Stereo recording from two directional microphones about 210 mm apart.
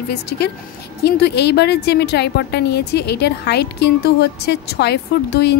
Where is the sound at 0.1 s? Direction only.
50° left (ahead or behind).